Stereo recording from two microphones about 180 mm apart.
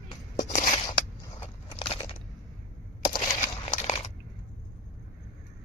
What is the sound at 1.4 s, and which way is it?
Biting, 30° left (ahead or behind).